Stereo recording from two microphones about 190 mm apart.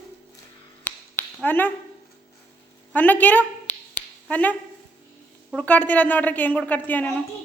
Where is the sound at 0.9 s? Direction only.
10° left (ahead or behind).